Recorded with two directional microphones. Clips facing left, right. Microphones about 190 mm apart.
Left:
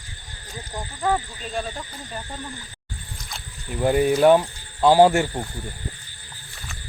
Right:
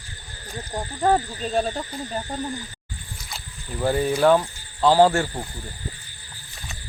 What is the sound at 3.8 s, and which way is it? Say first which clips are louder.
Speech: left 3 dB; 15° left (ahead or behind).